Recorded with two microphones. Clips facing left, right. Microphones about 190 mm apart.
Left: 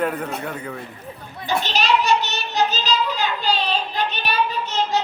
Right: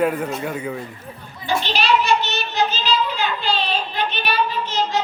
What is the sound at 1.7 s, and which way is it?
Child singing, 40° left (ahead or behind).